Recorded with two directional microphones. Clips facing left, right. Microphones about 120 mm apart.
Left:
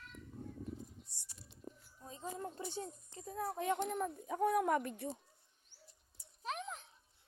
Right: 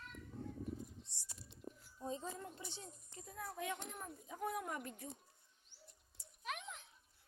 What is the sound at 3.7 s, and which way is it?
Speech, 80° left.